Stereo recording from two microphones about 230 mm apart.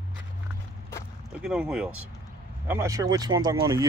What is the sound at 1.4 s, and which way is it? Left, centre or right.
Speech, centre.